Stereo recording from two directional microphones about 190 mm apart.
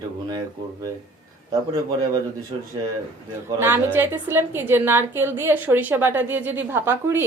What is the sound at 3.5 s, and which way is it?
A woman's voice, 10° right (ahead or behind).